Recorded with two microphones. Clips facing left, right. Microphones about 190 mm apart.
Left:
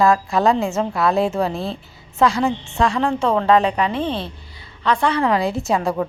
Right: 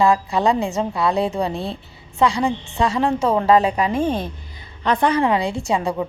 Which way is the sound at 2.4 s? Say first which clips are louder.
Left 1 dB; 15° right (ahead or behind).